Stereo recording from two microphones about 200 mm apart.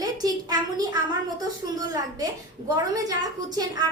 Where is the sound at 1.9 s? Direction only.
20° right (ahead or behind).